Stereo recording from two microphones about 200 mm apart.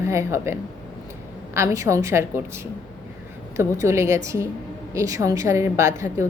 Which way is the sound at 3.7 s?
15° right (ahead or behind).